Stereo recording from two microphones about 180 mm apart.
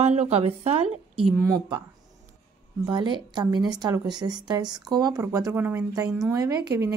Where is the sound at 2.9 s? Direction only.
25° right (ahead or behind).